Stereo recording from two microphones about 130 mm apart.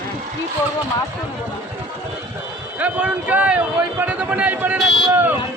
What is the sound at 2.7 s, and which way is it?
A man's voice, 10° right (ahead or behind).